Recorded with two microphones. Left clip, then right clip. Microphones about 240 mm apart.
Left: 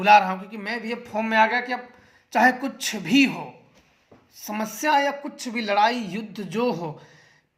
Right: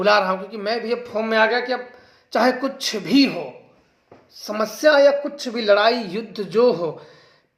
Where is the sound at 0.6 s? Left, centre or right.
Left.